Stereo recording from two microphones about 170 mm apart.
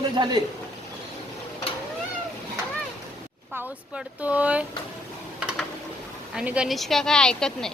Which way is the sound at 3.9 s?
10° right (ahead or behind).